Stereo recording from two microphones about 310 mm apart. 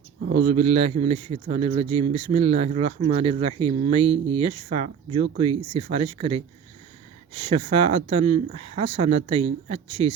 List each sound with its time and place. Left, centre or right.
0.4 s a man's voice: centre